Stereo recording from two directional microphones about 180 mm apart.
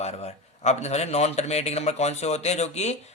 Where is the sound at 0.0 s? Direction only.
35° left (ahead or behind).